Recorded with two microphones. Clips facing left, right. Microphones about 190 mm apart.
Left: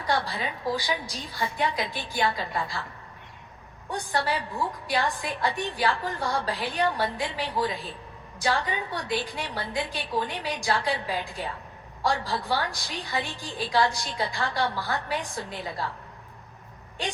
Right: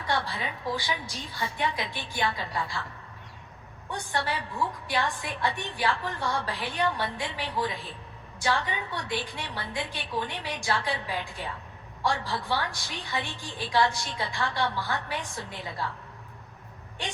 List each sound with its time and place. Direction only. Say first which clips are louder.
0.0 s a woman's voice: left 2 dB; 40° left (ahead or behind)
3.8 s a woman's voice: left 3 dB; 40° left (ahead or behind)